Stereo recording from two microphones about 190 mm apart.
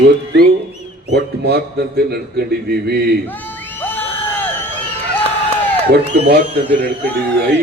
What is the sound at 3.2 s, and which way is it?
Music, 10° left (ahead or behind).